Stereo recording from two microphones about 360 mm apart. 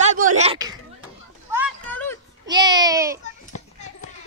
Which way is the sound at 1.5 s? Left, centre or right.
Centre.